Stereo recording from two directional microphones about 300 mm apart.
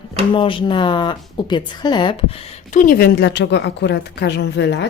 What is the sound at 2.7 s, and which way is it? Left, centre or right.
A woman's voice, left.